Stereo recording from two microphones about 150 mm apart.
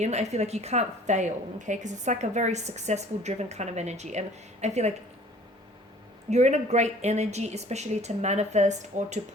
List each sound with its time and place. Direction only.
0.0 s a woman's voice: 45° right (ahead or behind)
6.3 s a woman's voice: 50° right (ahead or behind)